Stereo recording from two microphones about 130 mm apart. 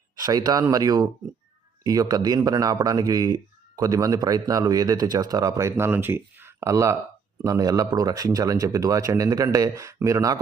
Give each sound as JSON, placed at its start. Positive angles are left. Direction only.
{"t": 0.2, "sound": "speech", "side_deg": -30}